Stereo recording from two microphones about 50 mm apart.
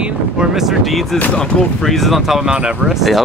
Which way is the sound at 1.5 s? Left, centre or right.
Centre.